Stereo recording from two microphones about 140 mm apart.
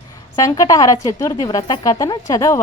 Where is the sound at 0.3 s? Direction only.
25° left (ahead or behind).